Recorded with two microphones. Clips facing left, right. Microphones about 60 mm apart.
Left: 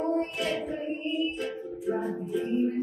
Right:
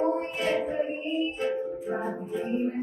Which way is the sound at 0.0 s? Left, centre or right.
Right.